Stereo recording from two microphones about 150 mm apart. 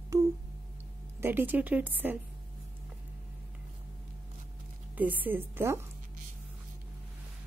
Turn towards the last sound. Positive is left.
turn(degrees=-15)  # may be behind; listen again after turning